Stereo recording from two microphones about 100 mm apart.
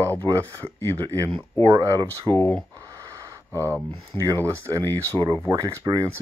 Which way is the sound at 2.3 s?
25° left (ahead or behind).